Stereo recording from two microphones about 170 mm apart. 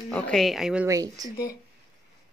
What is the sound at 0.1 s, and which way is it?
Speech, 5° left (ahead or behind).